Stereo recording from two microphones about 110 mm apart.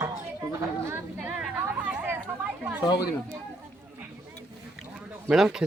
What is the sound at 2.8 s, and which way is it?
Speech, 40° left (ahead or behind).